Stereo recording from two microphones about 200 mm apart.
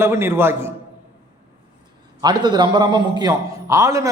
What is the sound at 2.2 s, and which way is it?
A man's voice, 20° right (ahead or behind).